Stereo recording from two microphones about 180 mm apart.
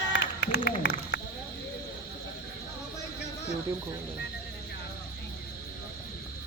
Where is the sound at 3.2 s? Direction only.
35° left (ahead or behind).